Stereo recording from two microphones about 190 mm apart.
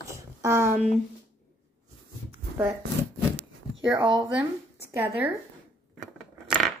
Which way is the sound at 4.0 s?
25° right (ahead or behind).